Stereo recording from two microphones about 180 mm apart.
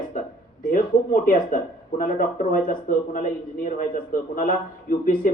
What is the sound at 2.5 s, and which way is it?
Speech, 50° left (ahead or behind).